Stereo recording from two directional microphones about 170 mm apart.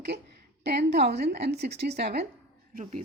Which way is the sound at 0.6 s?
80° right.